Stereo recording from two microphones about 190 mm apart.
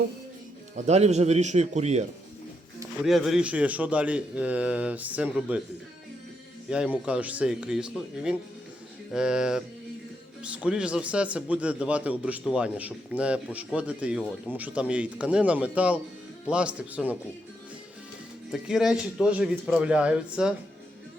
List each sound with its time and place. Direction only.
0.8 s a man's voice: 35° right (ahead or behind)
3.0 s a man's voice: centre (ahead or behind)
6.7 s a man's voice: 5° right (ahead or behind)
18.5 s a man's voice: 5° right (ahead or behind)